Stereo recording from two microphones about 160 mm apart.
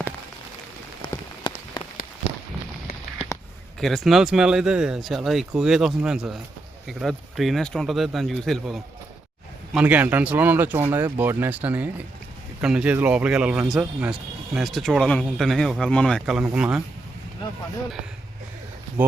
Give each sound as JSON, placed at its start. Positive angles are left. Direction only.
{"t": 1.0, "sound": "rain on surface", "side_deg": 30}
{"t": 3.8, "sound": "speech", "side_deg": 0}
{"t": 19.0, "sound": "speech", "side_deg": -10}